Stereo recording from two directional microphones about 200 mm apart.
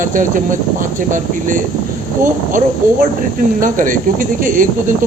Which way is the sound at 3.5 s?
40° right (ahead or behind).